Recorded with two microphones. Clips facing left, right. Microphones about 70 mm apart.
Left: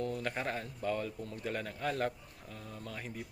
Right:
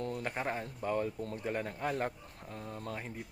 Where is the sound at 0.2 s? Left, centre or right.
Right.